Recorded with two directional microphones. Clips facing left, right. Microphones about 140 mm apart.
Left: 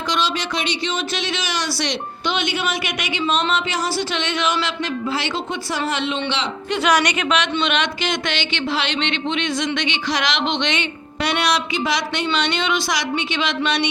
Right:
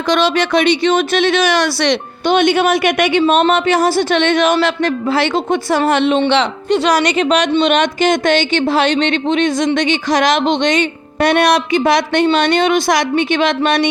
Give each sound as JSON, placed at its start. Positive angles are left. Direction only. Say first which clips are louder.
{"t": 0.1, "sound": "speech", "louder": "right 10 dB", "side_deg": -60}
{"t": 6.7, "sound": "speech", "louder": "right 3 dB", "side_deg": -35}